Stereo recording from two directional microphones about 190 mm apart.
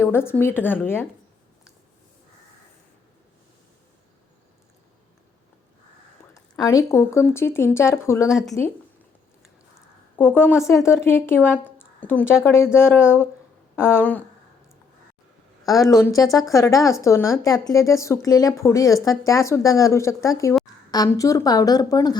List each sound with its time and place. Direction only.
0.0 s speech: 10° left (ahead or behind)
6.3 s speech: 15° left (ahead or behind)
8.3 s speech: centre (ahead or behind)
10.2 s speech: 10° left (ahead or behind)
15.6 s a woman's voice: 20° left (ahead or behind)